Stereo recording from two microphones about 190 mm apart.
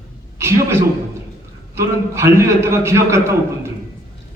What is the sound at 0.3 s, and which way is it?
A man's voice, 15° right (ahead or behind).